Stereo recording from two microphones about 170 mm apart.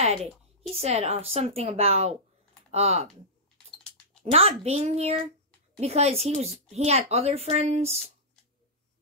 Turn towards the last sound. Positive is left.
turn(degrees=-35)  # may be behind; listen again after turning